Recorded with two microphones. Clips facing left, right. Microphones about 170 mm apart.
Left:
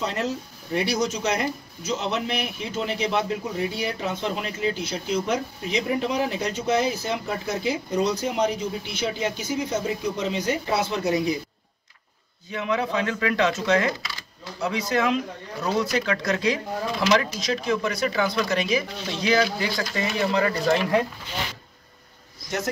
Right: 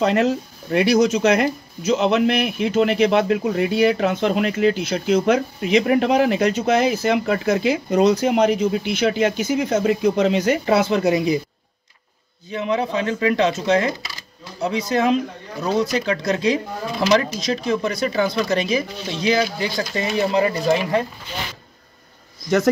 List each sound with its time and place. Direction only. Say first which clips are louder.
0.0 s speech: right 9 dB; 80° right
12.4 s speech: right 4 dB; 25° right (ahead or behind)